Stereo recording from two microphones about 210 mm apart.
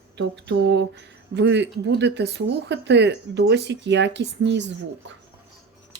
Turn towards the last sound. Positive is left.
turn(degrees=-60)  # may be behind; listen again after turning